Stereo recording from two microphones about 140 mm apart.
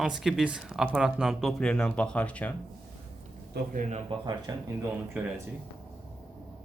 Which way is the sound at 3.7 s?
55° right (ahead or behind).